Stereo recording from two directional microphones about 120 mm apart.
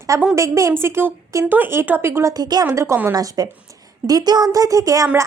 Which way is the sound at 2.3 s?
35° right (ahead or behind).